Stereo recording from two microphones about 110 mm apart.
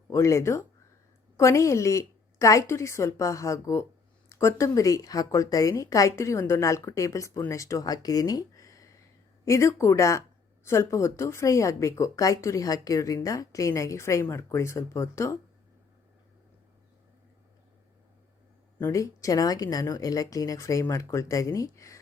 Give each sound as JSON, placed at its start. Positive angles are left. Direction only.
{"t": 0.1, "sound": "speech", "side_deg": 25}
{"t": 18.8, "sound": "speech", "side_deg": 30}